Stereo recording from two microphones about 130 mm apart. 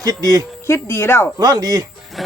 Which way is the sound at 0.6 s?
20° left (ahead or behind).